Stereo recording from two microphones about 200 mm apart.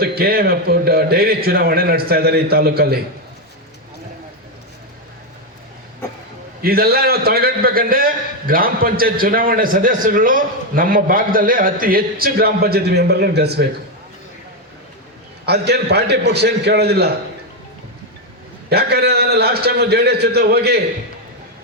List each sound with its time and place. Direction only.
0.0 s a man's voice: 50° right (ahead or behind)
6.6 s a man's voice: 50° right (ahead or behind)
15.4 s a man's voice: 55° right (ahead or behind)
18.7 s a man's voice: 55° right (ahead or behind)